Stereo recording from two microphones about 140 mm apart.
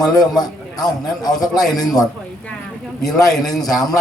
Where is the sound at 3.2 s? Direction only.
5° left (ahead or behind).